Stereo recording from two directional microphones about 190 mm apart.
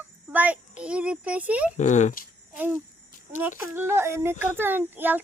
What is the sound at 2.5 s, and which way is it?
Speech, 10° right (ahead or behind).